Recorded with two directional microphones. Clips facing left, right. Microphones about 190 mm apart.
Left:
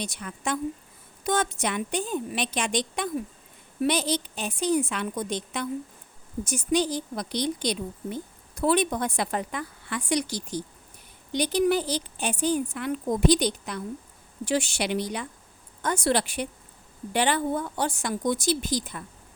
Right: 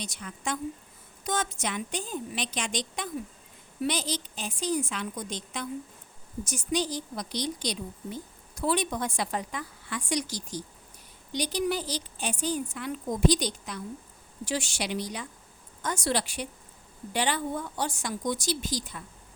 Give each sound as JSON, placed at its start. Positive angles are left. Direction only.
{"t": 0.0, "sound": "a woman's voice", "side_deg": 60}